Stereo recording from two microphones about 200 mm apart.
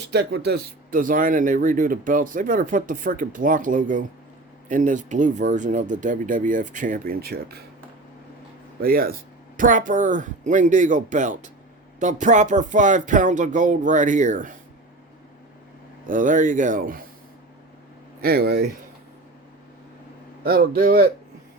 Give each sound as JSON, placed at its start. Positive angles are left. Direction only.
{"t": 0.1, "sound": "speech", "side_deg": -55}
{"t": 8.8, "sound": "speech", "side_deg": -45}
{"t": 16.0, "sound": "speech", "side_deg": -40}
{"t": 18.2, "sound": "a man's voice", "side_deg": -50}
{"t": 20.4, "sound": "a man's voice", "side_deg": -50}